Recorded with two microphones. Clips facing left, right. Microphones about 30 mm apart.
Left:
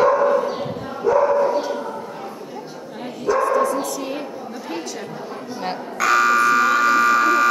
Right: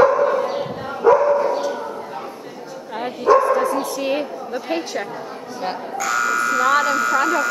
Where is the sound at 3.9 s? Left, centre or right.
Right.